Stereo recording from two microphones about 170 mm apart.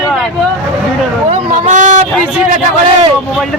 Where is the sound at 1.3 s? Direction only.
45° right (ahead or behind).